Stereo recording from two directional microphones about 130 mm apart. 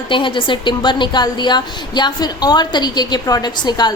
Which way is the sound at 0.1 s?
40° left (ahead or behind).